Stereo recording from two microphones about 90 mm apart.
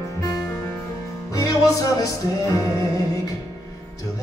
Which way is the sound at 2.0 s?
35° left (ahead or behind).